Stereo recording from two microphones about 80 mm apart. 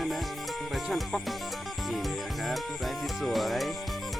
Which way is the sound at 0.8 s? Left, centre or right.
Centre.